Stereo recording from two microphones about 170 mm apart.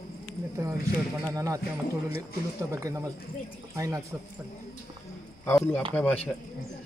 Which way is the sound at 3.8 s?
20° right (ahead or behind).